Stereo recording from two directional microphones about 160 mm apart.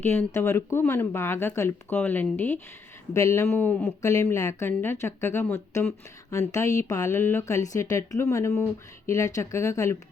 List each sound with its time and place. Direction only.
0.0 s speech: 15° left (ahead or behind)